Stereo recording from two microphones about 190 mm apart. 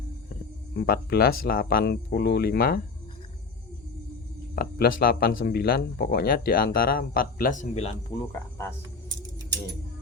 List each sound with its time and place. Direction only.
0.8 s speech: 55° left (ahead or behind)
4.5 s speech: 50° left (ahead or behind)
8.2 s cricket: 15° left (ahead or behind)